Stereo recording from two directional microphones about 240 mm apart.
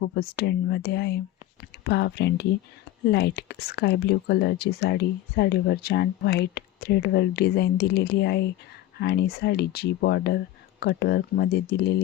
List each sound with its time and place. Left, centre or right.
0.0 s speech: left